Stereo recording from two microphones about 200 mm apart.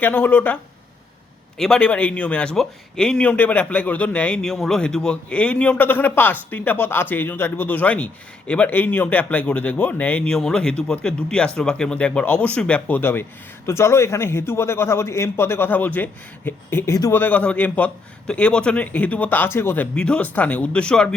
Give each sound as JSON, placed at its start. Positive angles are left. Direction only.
{"t": 0.0, "sound": "speech", "side_deg": 10}